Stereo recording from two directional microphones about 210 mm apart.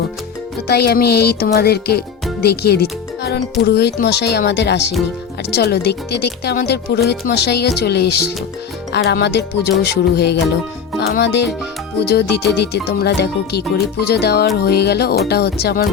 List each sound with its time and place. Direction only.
0.7 s speech: 50° left (ahead or behind)